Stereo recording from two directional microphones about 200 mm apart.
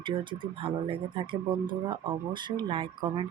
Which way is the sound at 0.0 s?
25° right (ahead or behind).